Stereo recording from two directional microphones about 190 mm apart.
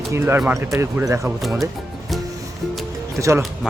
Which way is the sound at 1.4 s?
Centre (ahead or behind).